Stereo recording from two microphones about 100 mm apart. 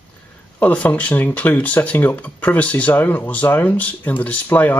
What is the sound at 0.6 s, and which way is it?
Speech, 15° left (ahead or behind).